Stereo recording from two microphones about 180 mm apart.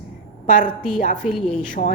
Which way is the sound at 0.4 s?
50° left (ahead or behind).